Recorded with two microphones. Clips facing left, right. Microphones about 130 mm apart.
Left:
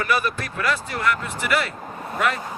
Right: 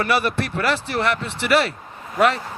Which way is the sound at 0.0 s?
30° right (ahead or behind).